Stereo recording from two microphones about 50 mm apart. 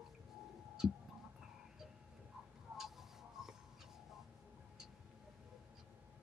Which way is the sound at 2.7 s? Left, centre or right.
Centre.